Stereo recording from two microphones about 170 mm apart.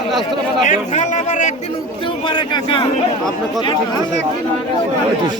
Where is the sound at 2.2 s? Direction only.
30° left (ahead or behind).